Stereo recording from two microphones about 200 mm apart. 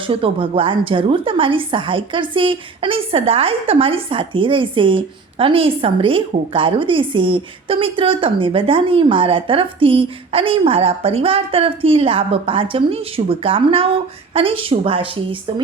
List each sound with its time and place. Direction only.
0.0 s a woman's voice: 25° right (ahead or behind)